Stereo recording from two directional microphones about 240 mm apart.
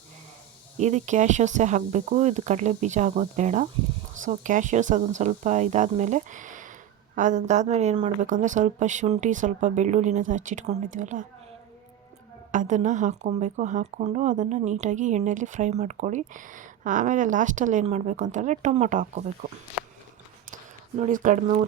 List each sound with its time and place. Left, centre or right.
0.8 s speech: right
12.5 s speech: right
21.0 s speech: right